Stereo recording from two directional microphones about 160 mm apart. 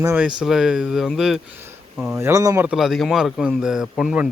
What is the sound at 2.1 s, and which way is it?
Speech, 20° right (ahead or behind).